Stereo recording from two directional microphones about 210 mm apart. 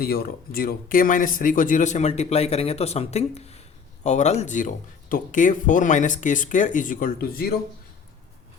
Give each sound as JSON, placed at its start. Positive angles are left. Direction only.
{"t": 0.0, "sound": "speech", "side_deg": 45}